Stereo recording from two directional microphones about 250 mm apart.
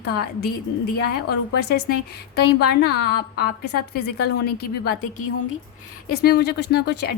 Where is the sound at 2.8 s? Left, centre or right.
Left.